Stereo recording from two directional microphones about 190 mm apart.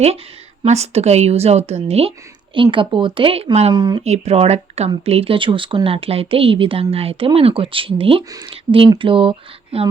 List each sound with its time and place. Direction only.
0.6 s a woman's voice: 35° right (ahead or behind)